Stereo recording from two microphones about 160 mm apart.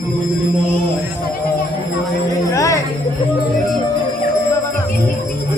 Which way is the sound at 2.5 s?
20° left (ahead or behind).